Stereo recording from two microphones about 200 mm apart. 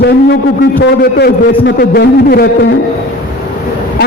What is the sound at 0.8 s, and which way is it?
A man's voice, 50° left (ahead or behind).